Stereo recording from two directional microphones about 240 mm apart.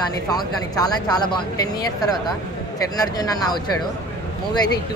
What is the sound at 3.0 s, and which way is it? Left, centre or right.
Speech, centre.